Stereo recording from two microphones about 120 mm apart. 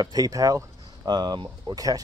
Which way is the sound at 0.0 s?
30° right (ahead or behind).